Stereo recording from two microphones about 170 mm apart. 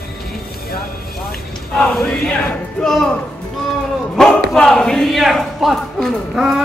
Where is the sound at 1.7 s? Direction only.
5° left (ahead or behind).